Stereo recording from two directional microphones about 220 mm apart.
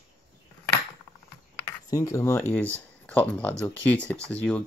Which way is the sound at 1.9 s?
15° left (ahead or behind).